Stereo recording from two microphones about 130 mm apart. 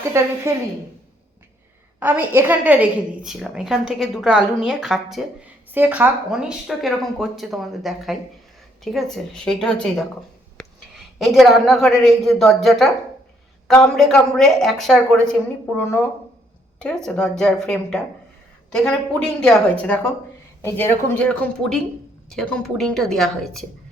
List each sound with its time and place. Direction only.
0.1 s a woman's voice: 20° right (ahead or behind)
2.0 s a woman's voice: 15° right (ahead or behind)
5.7 s speech: 15° right (ahead or behind)
6.3 s a woman's voice: centre (ahead or behind)
13.9 s a woman's voice: 5° left (ahead or behind)
15.8 s a woman's voice: 20° left (ahead or behind)
16.8 s a woman's voice: 5° left (ahead or behind)
20.6 s a woman's voice: 20° left (ahead or behind)
21.2 s a woman's voice: 5° left (ahead or behind)